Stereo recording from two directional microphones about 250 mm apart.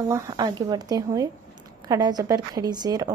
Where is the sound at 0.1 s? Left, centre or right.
Centre.